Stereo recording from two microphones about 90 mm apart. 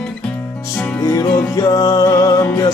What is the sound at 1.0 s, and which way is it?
Music, 40° left (ahead or behind).